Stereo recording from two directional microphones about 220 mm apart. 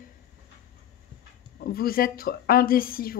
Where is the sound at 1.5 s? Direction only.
45° left (ahead or behind).